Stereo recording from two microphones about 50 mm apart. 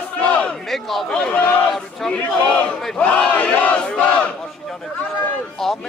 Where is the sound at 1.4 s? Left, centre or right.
Left.